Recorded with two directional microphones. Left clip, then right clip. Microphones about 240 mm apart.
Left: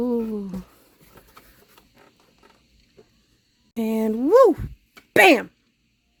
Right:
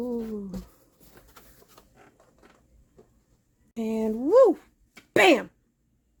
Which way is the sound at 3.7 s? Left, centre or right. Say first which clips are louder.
Left 4 dB; left.